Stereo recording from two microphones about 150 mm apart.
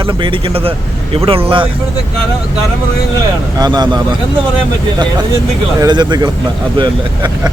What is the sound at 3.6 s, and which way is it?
Speech, 30° right (ahead or behind).